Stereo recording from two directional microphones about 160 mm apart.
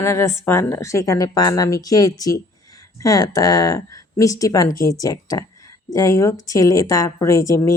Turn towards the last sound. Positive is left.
turn(degrees=20)  # may be behind; listen again after turning